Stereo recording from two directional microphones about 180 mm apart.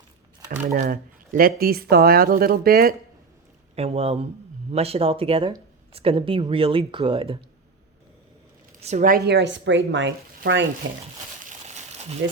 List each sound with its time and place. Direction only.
0.7 s speech: 55° right (ahead or behind)
3.8 s speech: 35° right (ahead or behind)
8.8 s speech: 40° right (ahead or behind); by 10.7 s 90° right
11.4 s a sound: 40° right (ahead or behind)